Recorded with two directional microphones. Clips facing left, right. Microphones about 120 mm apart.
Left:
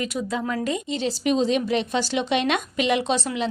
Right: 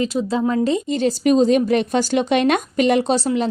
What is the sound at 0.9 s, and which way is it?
A woman's voice, 45° right (ahead or behind).